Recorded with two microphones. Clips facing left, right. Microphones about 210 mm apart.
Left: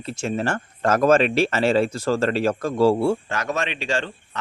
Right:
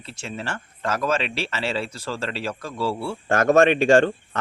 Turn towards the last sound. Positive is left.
turn(degrees=-50)  # may be behind; listen again after turning